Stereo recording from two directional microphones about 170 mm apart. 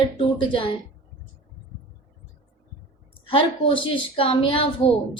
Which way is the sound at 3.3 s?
30° left (ahead or behind).